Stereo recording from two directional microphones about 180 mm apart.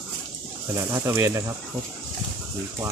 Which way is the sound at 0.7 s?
15° right (ahead or behind).